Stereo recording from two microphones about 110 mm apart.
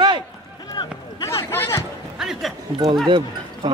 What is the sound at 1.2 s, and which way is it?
Speech, 25° left (ahead or behind).